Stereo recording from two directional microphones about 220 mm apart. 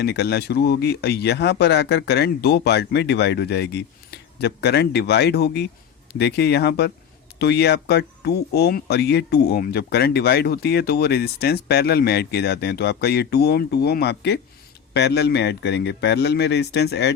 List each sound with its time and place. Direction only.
0.0 s speech: 50° left (ahead or behind)